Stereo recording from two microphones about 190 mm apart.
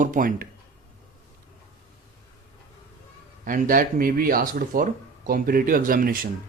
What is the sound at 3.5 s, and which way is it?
Speech, 45° right (ahead or behind).